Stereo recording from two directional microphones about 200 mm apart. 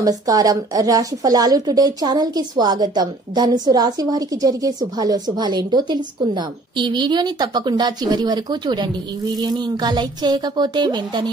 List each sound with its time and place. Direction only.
0.0 s a woman's voice: 20° right (ahead or behind)